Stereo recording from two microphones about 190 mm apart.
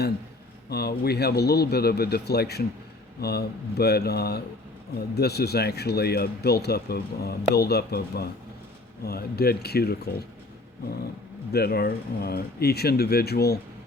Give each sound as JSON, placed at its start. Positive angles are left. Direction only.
{"t": 0.7, "sound": "speech", "side_deg": 55}
{"t": 11.5, "sound": "speech", "side_deg": 55}